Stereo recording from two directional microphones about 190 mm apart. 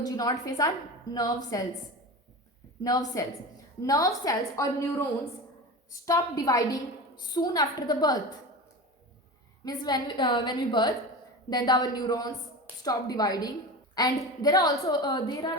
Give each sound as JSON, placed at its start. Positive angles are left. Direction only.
{"t": 0.0, "sound": "a woman's voice", "side_deg": 20}
{"t": 2.8, "sound": "a woman's voice", "side_deg": 20}
{"t": 9.6, "sound": "a woman's voice", "side_deg": 20}